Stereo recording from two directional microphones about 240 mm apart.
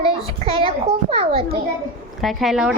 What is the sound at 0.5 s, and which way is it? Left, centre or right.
Speech, right.